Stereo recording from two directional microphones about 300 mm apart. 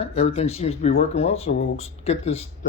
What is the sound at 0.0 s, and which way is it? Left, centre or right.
Speech, centre.